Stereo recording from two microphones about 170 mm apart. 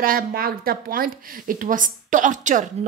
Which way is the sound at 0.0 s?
60° right (ahead or behind).